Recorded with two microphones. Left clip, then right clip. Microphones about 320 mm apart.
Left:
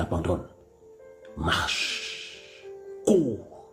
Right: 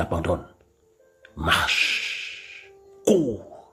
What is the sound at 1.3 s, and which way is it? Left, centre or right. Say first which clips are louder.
Music: right 5 dB; centre.